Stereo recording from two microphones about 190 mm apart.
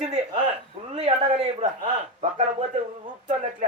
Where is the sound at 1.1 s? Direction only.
35° right (ahead or behind).